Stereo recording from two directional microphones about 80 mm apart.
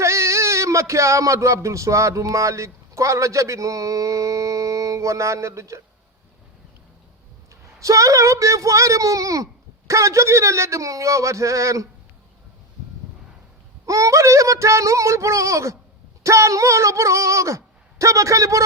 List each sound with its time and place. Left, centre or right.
0.0 s speech: right
7.5 s a woman's voice: right
13.8 s a woman's voice: right